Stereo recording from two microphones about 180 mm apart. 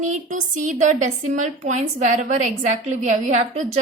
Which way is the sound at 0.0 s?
45° right (ahead or behind).